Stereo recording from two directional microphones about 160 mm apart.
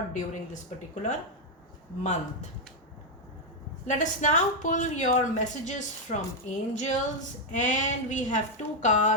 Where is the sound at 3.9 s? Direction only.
50° left (ahead or behind).